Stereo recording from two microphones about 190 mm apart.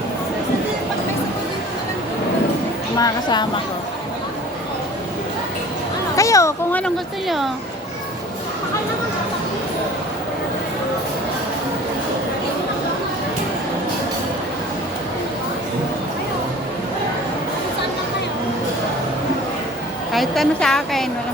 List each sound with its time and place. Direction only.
3.0 s speech: 20° left (ahead or behind)
6.1 s a child's voice: 15° left (ahead or behind); by 7.5 s centre (ahead or behind)
20.1 s a woman's voice: centre (ahead or behind)